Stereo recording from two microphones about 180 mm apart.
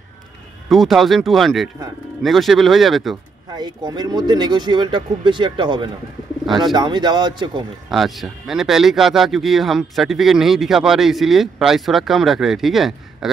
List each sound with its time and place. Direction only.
0.7 s speech: centre (ahead or behind)
3.5 s speech: 25° right (ahead or behind)
7.9 s speech: centre (ahead or behind)